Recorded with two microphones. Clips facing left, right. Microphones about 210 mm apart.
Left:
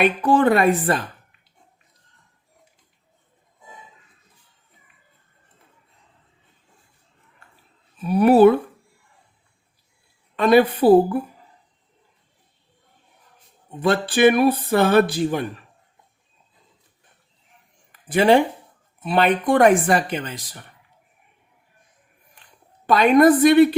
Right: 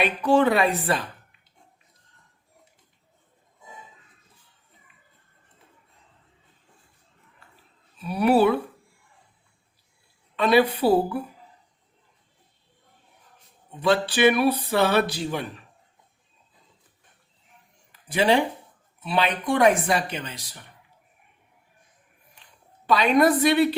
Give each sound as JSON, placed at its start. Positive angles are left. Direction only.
{"t": 0.0, "sound": "speech", "side_deg": 50}
{"t": 8.0, "sound": "speech", "side_deg": 45}
{"t": 10.3, "sound": "speech", "side_deg": 50}
{"t": 13.7, "sound": "speech", "side_deg": 50}
{"t": 18.1, "sound": "speech", "side_deg": 50}
{"t": 22.9, "sound": "speech", "side_deg": 50}